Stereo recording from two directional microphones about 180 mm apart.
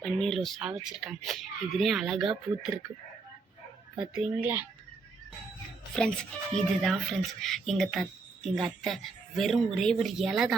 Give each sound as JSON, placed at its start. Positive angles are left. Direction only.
{"t": 0.0, "sound": "speech", "side_deg": 0}
{"t": 3.9, "sound": "a woman's voice", "side_deg": -5}
{"t": 6.0, "sound": "speech", "side_deg": 5}